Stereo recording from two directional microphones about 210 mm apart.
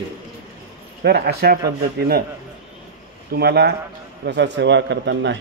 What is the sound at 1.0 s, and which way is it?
Speech, 50° right (ahead or behind).